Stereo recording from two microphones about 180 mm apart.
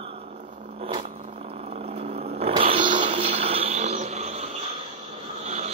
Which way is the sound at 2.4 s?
30° right (ahead or behind).